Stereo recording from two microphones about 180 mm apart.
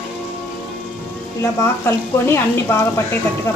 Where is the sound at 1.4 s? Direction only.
15° left (ahead or behind).